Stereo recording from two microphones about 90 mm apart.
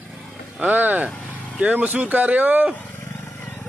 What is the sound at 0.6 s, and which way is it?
Speech, 20° right (ahead or behind).